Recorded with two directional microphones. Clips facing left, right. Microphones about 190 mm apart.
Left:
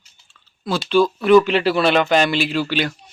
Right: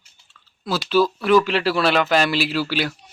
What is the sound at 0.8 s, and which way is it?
Speech, 5° right (ahead or behind).